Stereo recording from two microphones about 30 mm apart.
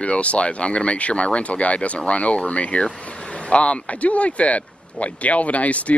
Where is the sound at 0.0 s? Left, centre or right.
Left.